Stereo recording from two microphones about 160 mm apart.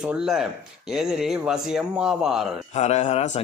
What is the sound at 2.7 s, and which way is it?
Speech, 45° left (ahead or behind).